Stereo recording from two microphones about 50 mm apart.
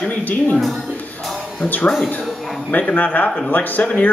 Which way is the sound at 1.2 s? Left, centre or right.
Centre.